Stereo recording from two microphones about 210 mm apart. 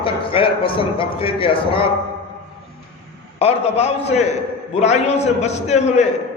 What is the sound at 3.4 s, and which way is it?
A man's voice, 30° left (ahead or behind).